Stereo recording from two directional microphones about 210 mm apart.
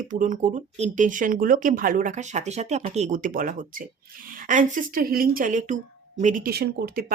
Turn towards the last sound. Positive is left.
turn(degrees=-45)  # may be behind; listen again after turning